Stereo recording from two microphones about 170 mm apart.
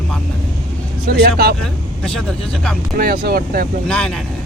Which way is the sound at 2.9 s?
60° right (ahead or behind).